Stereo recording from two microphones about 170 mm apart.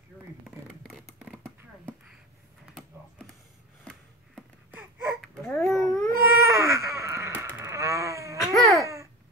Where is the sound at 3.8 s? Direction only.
5° right (ahead or behind).